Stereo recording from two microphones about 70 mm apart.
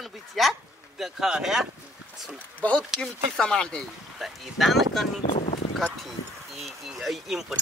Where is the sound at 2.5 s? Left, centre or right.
Centre.